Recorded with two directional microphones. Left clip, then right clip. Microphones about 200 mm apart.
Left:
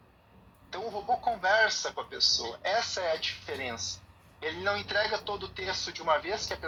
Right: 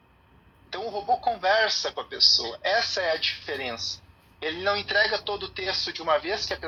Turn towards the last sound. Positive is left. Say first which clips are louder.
# right 4 dB
turn(degrees=-30)  # may be behind; listen again after turning